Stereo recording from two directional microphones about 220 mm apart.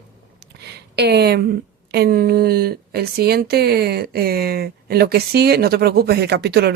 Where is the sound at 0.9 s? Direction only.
50° right (ahead or behind).